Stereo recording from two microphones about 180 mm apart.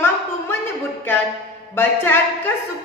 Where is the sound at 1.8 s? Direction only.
10° left (ahead or behind).